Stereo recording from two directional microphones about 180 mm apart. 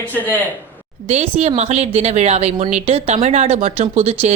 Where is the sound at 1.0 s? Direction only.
35° right (ahead or behind).